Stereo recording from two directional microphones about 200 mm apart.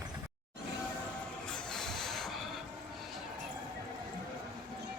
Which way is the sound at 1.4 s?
5° left (ahead or behind).